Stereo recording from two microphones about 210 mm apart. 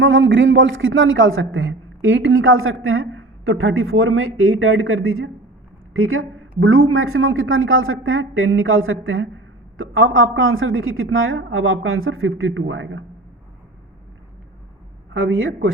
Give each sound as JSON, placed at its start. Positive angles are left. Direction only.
{"t": 0.0, "sound": "a woman's voice", "side_deg": -70}
{"t": 5.9, "sound": "a woman's voice", "side_deg": -85}
{"t": 15.1, "sound": "a woman's voice", "side_deg": -65}